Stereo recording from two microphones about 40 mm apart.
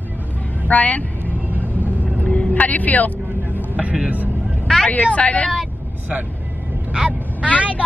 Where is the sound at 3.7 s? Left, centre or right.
Right.